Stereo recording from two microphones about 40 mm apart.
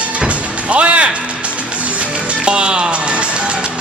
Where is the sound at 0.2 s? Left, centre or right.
Right.